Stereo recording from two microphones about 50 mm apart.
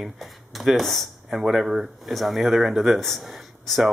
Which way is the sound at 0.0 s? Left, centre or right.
Centre.